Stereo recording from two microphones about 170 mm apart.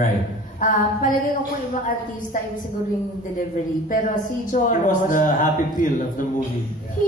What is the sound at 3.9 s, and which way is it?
A woman's voice, 50° left (ahead or behind).